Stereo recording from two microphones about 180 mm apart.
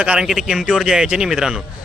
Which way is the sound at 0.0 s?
5° right (ahead or behind).